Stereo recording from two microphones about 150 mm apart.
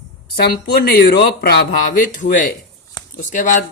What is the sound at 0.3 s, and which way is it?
Speech, 90° left.